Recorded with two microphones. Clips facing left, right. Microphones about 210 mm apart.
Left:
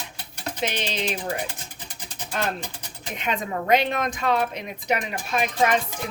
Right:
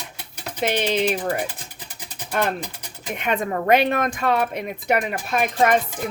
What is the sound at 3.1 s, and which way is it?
Speech, 55° right (ahead or behind).